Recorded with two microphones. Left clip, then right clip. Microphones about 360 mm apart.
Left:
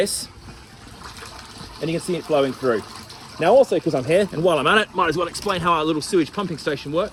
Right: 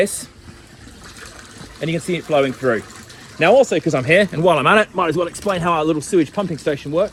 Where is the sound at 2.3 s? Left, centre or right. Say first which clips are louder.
Right 3 dB; right.